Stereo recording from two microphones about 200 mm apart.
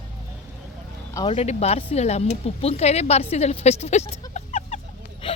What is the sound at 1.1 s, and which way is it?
Speech, 20° left (ahead or behind).